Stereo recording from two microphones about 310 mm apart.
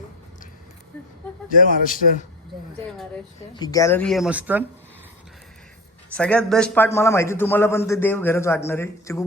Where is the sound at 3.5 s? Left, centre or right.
Centre.